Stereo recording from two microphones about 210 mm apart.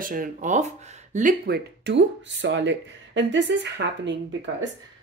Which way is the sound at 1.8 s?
60° right (ahead or behind).